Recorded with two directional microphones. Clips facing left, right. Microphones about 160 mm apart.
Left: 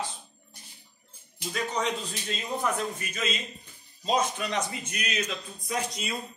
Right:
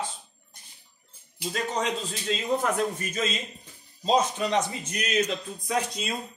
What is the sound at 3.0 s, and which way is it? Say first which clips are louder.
Speech: right 5 dB; 40° right (ahead or behind).